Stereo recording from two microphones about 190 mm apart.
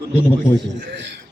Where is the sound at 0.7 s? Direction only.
65° right (ahead or behind).